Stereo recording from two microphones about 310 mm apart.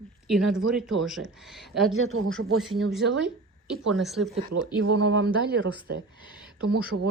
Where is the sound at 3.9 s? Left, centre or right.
Centre.